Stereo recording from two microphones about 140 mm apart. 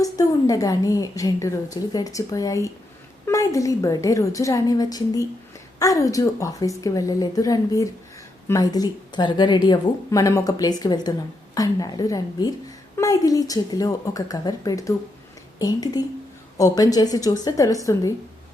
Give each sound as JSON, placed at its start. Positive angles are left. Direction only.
{"t": 0.0, "sound": "a woman's voice", "side_deg": 25}